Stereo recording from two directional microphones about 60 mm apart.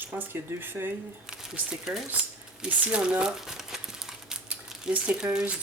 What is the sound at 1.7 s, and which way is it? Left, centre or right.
Speech, centre.